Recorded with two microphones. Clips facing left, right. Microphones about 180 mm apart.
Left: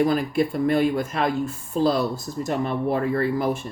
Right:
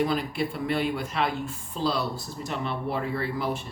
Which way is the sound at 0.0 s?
45° left (ahead or behind).